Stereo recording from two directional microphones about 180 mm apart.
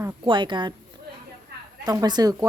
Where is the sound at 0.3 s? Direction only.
25° right (ahead or behind).